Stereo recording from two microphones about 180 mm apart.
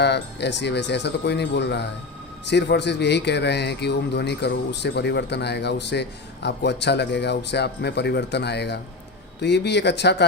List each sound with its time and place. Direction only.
0.0 s speech: 70° left (ahead or behind)